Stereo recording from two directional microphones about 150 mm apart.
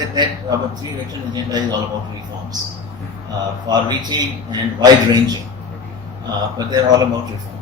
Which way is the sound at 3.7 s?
25° right (ahead or behind).